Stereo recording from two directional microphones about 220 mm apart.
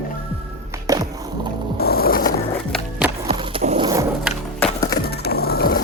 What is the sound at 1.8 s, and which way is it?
Mechanisms, 45° left (ahead or behind).